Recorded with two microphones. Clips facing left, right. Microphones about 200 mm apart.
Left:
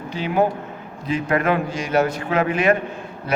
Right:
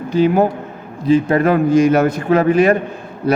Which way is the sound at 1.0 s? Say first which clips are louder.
Right 7 dB; 30° right (ahead or behind).